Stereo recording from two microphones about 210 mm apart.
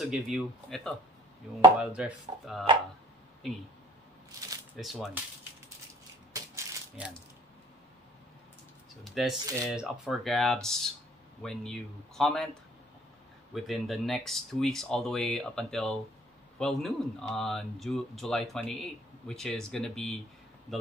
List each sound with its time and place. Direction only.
0.0 s speech: centre (ahead or behind)
4.7 s speech: centre (ahead or behind)
6.3 s rattle: 15° right (ahead or behind)
9.0 s speech: centre (ahead or behind)
13.6 s speech: centre (ahead or behind)